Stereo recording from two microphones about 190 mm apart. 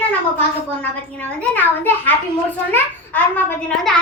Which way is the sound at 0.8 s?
5° left (ahead or behind).